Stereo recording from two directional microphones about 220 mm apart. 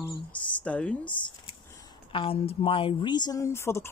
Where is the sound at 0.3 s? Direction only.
5° left (ahead or behind).